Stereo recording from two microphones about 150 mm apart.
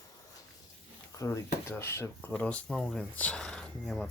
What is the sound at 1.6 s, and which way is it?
Speech, 15° left (ahead or behind).